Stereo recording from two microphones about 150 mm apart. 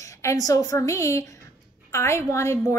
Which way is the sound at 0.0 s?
20° left (ahead or behind).